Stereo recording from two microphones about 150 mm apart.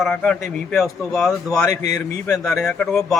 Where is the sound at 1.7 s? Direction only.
25° left (ahead or behind).